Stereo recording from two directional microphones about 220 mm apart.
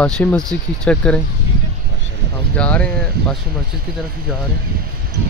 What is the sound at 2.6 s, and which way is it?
Speech, 5° left (ahead or behind).